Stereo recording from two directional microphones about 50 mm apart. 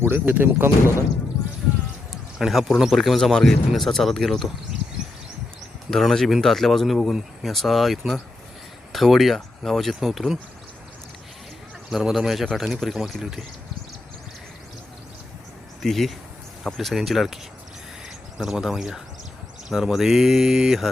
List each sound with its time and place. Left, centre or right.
0.0 s speech: right
2.5 s speech: centre
5.9 s speech: centre
12.0 s speech: centre
15.8 s speech: centre
18.3 s mantra: centre